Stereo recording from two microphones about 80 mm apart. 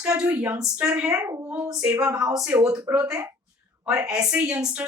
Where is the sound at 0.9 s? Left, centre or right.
Centre.